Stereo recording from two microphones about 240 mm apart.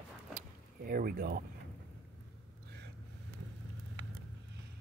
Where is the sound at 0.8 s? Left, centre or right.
Right.